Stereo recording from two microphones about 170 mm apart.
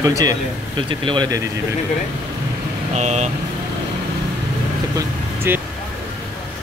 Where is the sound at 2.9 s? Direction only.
40° right (ahead or behind).